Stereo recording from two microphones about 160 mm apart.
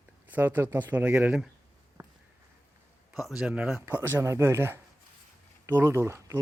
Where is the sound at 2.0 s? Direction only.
20° right (ahead or behind).